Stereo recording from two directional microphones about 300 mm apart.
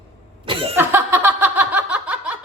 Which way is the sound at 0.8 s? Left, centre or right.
Centre.